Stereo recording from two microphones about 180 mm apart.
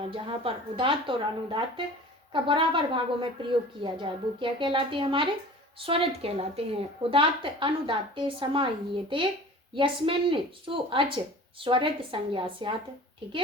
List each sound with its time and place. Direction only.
0.1 s a woman's voice: 30° right (ahead or behind)